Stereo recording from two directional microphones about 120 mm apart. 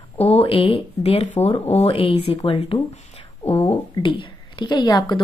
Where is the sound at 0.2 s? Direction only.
55° left (ahead or behind).